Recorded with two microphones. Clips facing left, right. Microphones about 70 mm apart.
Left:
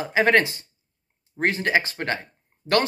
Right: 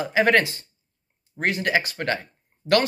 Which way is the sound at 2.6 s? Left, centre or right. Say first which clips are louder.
Right 2 dB; centre.